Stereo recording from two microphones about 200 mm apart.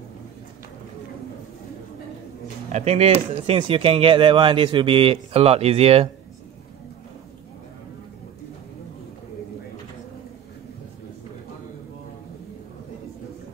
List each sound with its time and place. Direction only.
2.7 s speech: 35° right (ahead or behind)